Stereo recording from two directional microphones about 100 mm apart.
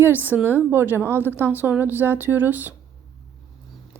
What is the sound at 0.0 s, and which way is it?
Speech, 20° right (ahead or behind).